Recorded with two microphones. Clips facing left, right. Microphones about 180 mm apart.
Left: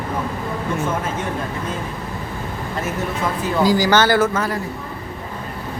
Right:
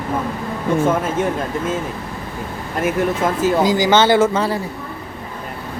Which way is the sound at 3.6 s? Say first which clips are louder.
Left 1 dB; 20° right (ahead or behind).